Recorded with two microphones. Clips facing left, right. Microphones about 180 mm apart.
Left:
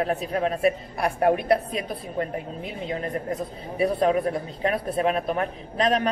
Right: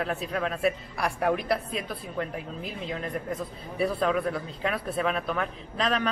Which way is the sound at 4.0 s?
40° left (ahead or behind).